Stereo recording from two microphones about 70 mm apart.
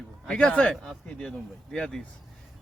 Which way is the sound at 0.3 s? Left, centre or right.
Centre.